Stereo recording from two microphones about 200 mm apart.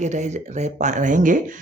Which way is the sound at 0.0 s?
35° right (ahead or behind).